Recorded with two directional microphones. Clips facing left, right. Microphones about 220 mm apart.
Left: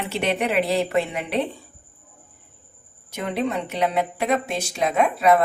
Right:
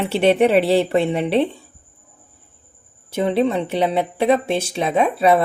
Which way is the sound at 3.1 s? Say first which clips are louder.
Right 7 dB; 30° right (ahead or behind).